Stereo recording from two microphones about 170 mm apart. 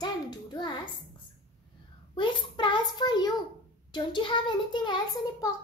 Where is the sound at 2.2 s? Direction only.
30° left (ahead or behind).